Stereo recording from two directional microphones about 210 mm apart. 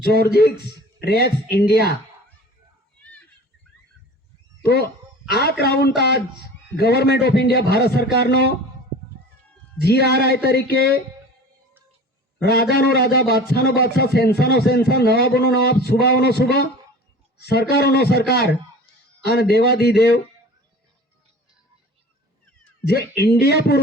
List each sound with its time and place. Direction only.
0.0 s a man's voice: 50° left (ahead or behind)
4.6 s a man's voice: 50° left (ahead or behind)
9.8 s a man's voice: 50° left (ahead or behind)
12.4 s a man's voice: 50° left (ahead or behind)
22.9 s a man's voice: 50° left (ahead or behind)